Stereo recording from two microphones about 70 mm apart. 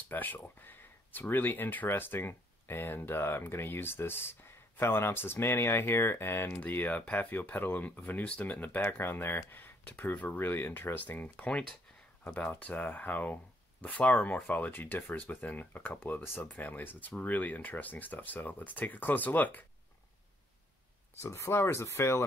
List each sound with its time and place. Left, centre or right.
0.1 s speech: left
6.6 s speech: left
21.2 s speech: left